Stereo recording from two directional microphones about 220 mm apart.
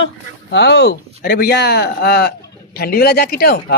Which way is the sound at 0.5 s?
50° left (ahead or behind).